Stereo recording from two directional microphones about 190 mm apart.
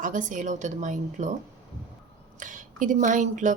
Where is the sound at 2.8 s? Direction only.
40° right (ahead or behind).